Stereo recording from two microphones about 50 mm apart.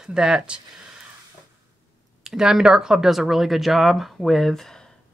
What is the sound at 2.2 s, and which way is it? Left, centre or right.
Speech, centre.